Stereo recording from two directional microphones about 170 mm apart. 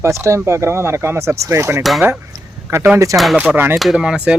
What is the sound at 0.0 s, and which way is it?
Speech, 15° right (ahead or behind).